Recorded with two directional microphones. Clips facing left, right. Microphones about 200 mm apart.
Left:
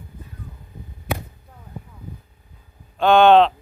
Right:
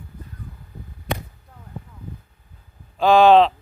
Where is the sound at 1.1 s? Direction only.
5° left (ahead or behind).